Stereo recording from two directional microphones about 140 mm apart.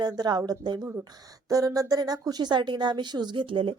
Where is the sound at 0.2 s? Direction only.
30° right (ahead or behind).